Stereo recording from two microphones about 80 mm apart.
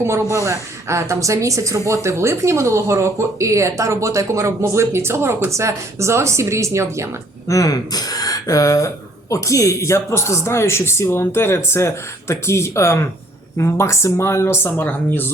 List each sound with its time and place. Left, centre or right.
0.3 s speech: right
7.4 s speech: left